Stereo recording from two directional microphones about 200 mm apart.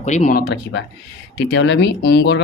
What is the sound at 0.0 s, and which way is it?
Speech, 35° left (ahead or behind).